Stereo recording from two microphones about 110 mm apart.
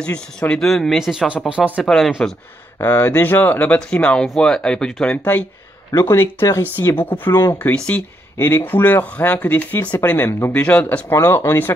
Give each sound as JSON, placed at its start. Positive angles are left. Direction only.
{"t": 0.0, "sound": "speech", "side_deg": 10}
{"t": 1.9, "sound": "speech", "side_deg": 5}
{"t": 2.8, "sound": "speech", "side_deg": 25}
{"t": 5.9, "sound": "speech", "side_deg": 30}